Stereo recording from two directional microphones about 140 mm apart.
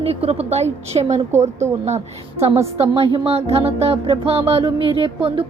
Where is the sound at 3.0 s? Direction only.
45° right (ahead or behind).